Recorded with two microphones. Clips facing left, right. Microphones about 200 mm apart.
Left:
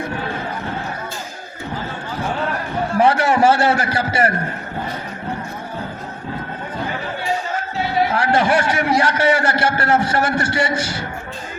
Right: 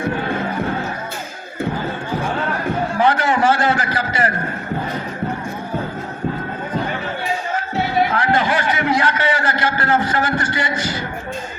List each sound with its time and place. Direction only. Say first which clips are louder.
3.0 s a man's voice: left 3 dB; 25° left (ahead or behind)
8.1 s a man's voice: left 2 dB; 30° left (ahead or behind)